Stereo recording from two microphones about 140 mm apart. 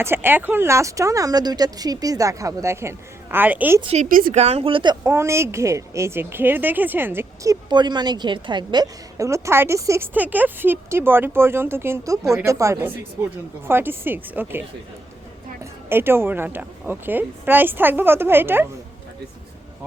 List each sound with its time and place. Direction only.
0.0 s a woman's voice: 15° right (ahead or behind)
4.1 s a woman's voice: 85° right
4.4 s speech: 50° right (ahead or behind)
5.0 s a woman's voice: 20° right (ahead or behind)
15.9 s a woman's voice: 15° right (ahead or behind)